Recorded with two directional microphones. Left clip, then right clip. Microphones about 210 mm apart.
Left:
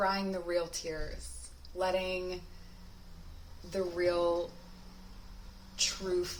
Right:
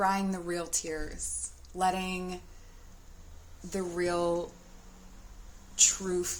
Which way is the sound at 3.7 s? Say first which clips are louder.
Even; 50° right (ahead or behind).